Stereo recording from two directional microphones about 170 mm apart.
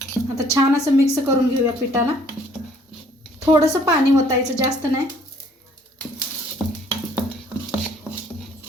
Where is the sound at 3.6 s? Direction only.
20° right (ahead or behind).